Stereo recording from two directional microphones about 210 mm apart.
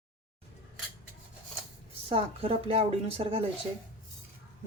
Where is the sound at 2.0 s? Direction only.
30° right (ahead or behind).